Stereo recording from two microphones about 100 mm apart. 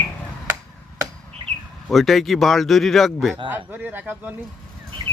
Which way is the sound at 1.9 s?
Centre (ahead or behind).